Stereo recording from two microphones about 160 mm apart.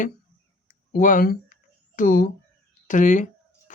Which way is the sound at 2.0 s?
55° left (ahead or behind).